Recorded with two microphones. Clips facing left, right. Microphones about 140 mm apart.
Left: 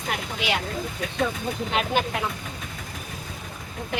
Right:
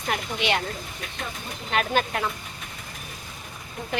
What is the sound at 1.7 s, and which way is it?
Speech, 15° left (ahead or behind).